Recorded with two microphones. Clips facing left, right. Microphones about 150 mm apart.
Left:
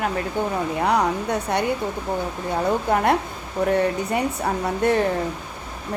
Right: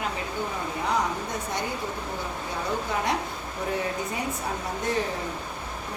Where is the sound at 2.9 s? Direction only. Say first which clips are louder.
Left 8 dB; 55° left (ahead or behind).